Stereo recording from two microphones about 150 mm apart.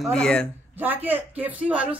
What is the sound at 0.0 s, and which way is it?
Speech, 5° left (ahead or behind).